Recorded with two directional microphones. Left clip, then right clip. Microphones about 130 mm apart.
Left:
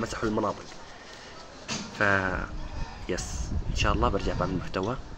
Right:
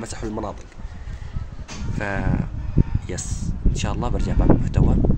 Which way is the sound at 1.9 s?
20° right (ahead or behind).